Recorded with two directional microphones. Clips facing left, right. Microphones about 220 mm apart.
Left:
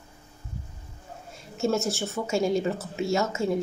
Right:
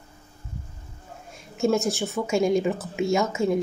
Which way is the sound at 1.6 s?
15° right (ahead or behind).